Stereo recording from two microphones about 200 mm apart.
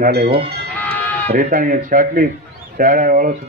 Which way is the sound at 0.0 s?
55° right (ahead or behind).